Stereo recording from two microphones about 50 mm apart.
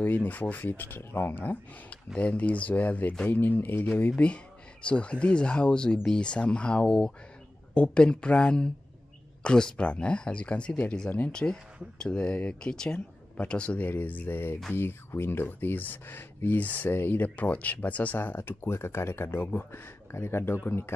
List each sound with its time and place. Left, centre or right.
0.0 s speech: left
2.1 s speech: left
4.2 s speech: left
13.8 s speech: left